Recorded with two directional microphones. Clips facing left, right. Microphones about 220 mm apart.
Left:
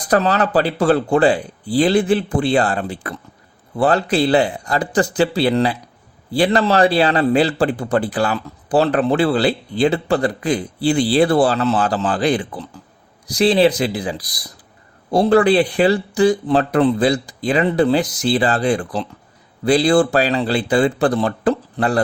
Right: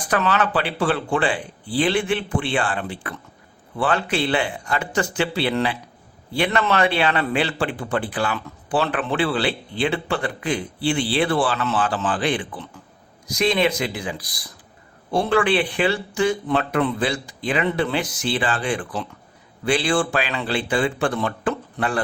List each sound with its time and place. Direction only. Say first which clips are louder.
0.1 s a man's voice: left 5 dB; 35° left (ahead or behind)